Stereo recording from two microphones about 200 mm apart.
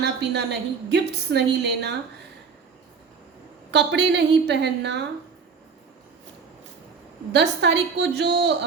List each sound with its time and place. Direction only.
0.0 s a woman's voice: 55° right (ahead or behind)
3.7 s a woman's voice: 60° right (ahead or behind)
7.3 s a woman's voice: 60° right (ahead or behind)